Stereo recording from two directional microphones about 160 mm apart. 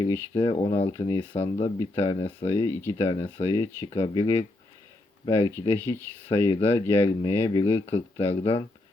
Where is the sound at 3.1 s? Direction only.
35° left (ahead or behind).